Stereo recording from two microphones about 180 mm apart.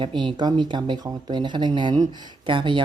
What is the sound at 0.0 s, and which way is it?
Speech, 30° right (ahead or behind).